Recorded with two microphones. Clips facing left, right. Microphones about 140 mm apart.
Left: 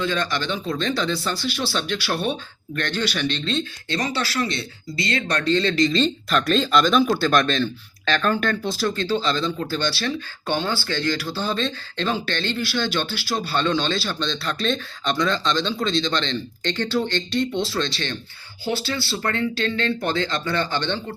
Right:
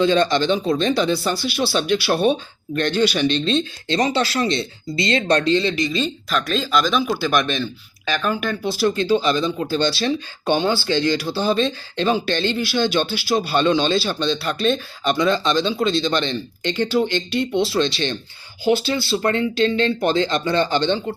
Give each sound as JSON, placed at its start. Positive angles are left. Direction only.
{"t": 0.0, "sound": "speech", "side_deg": -25}